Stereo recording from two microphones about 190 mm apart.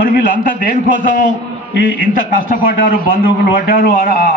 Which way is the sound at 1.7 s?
75° left (ahead or behind).